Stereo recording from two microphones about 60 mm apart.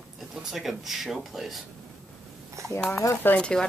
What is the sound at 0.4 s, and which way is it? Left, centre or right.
Speech, centre.